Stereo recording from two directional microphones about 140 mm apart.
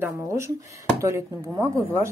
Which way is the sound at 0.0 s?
20° right (ahead or behind).